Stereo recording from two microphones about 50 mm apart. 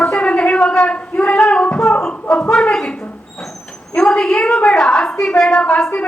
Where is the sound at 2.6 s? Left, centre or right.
Centre.